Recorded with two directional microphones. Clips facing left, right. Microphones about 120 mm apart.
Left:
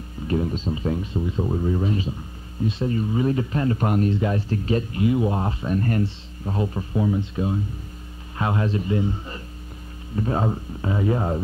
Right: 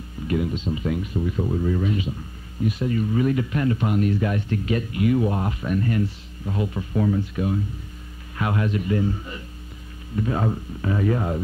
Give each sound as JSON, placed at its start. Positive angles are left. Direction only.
{"t": 0.3, "sound": "speech", "side_deg": 35}
{"t": 3.8, "sound": "speech", "side_deg": 45}
{"t": 4.1, "sound": "speech", "side_deg": 25}
{"t": 6.9, "sound": "speech", "side_deg": 15}
{"t": 10.1, "sound": "speech", "side_deg": 30}